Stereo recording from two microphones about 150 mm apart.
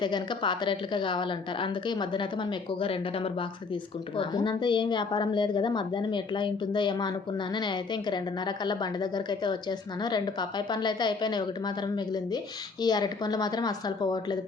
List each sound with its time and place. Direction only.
0.0 s a woman's voice: 30° left (ahead or behind)